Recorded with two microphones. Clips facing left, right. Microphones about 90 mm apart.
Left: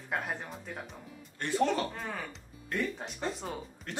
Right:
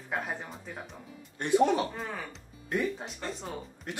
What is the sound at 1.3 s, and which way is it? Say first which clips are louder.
Speech: right 4 dB; 15° right (ahead or behind).